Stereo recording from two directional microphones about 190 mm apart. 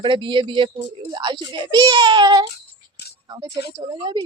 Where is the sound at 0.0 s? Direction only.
25° right (ahead or behind).